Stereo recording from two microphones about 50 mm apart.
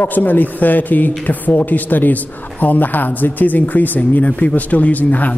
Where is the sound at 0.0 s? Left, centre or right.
Left.